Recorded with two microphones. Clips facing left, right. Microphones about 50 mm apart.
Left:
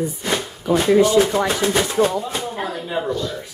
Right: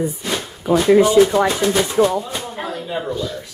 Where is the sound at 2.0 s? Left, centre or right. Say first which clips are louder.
Right 3 dB; centre.